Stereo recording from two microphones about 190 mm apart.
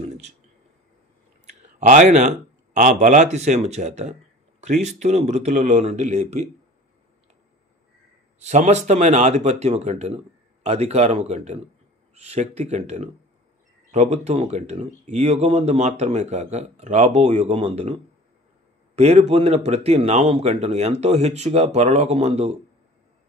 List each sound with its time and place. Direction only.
0.0 s a sound: 35° right (ahead or behind)
1.8 s speech: 40° right (ahead or behind)
8.4 s speech: 35° right (ahead or behind)
18.9 s speech: 35° right (ahead or behind)